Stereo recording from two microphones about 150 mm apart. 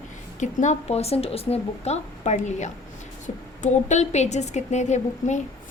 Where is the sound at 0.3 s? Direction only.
55° left (ahead or behind).